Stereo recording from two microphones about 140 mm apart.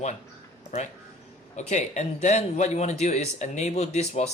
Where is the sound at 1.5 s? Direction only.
55° left (ahead or behind).